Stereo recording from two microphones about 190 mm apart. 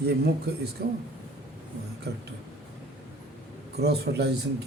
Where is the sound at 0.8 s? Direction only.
55° right (ahead or behind).